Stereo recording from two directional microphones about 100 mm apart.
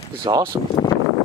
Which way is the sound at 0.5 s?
25° right (ahead or behind).